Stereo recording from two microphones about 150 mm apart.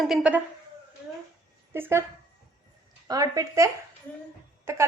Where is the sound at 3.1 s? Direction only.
25° right (ahead or behind).